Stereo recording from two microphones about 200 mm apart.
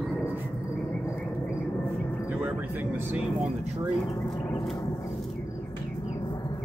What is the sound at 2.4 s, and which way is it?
Speech, 10° right (ahead or behind).